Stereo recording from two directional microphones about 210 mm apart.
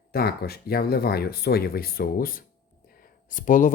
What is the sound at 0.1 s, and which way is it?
Speech, 45° left (ahead or behind).